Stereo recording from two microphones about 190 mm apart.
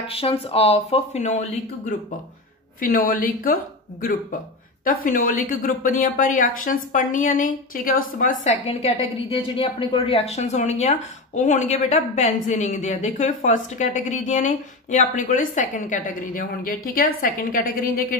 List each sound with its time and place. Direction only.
0.0 s a woman's voice: 30° left (ahead or behind)
2.8 s a woman's voice: 50° left (ahead or behind)
5.0 s a woman's voice: 45° left (ahead or behind)
8.6 s a woman's voice: 30° left (ahead or behind); by 18.0 s 50° left (ahead or behind)